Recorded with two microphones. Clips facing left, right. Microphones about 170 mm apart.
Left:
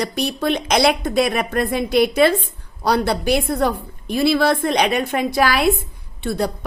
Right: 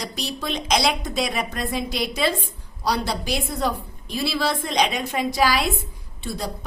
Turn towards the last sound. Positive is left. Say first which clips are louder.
# left 8 dB
turn(degrees=60)  # may be behind; listen again after turning